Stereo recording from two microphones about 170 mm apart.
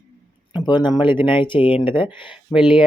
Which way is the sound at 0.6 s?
25° left (ahead or behind).